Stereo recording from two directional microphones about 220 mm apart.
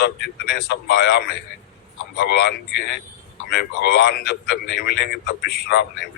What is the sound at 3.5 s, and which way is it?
A man's voice, 50° left (ahead or behind).